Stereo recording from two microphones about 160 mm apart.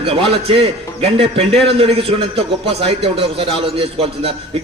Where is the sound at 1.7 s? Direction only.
35° right (ahead or behind).